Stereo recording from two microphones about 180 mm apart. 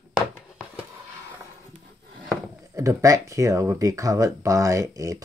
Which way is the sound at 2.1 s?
20° right (ahead or behind).